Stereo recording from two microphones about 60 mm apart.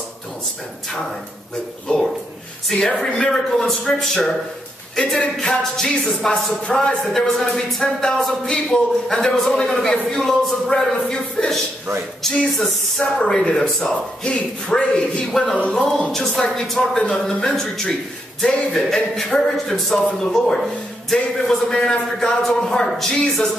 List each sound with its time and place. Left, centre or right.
1.9 s speech: centre
2.7 s speech: centre